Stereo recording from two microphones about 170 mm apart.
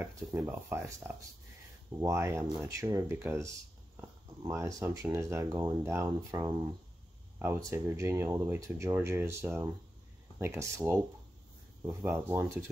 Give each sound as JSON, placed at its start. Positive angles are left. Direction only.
{"t": 0.0, "sound": "speech", "side_deg": -10}
{"t": 4.5, "sound": "speech", "side_deg": -20}
{"t": 11.9, "sound": "speech", "side_deg": -5}